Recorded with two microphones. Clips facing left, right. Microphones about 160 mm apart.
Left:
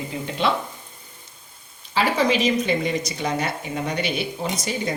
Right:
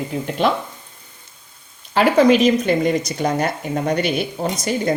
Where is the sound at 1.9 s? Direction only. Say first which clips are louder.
Right 7 dB; 50° right (ahead or behind).